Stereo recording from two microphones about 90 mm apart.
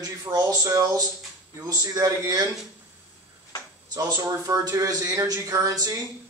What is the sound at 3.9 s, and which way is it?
Speech, 45° right (ahead or behind).